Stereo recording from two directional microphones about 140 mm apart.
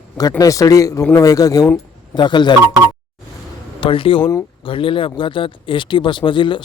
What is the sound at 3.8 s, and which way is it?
Speech, 40° left (ahead or behind).